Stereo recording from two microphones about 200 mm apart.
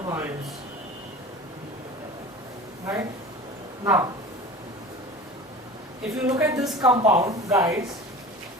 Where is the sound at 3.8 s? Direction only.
15° right (ahead or behind).